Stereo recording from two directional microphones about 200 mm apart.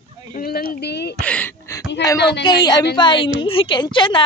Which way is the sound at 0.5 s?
50° left (ahead or behind).